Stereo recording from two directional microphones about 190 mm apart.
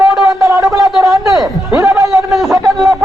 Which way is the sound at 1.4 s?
Centre (ahead or behind).